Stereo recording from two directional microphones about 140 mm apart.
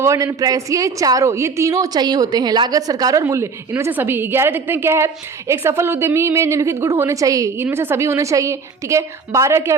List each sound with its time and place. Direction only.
0.0 s a woman's voice: 20° right (ahead or behind)